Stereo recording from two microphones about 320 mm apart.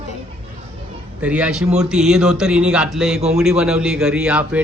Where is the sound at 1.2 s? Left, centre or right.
Centre.